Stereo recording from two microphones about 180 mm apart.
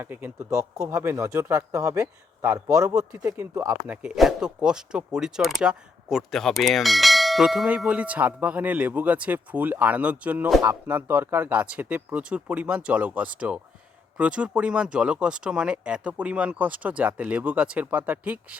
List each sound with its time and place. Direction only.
0.0 s speech: 10° right (ahead or behind)
3.8 s speech: 5° right (ahead or behind)